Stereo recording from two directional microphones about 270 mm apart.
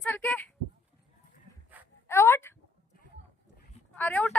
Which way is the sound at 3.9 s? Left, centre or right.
Centre.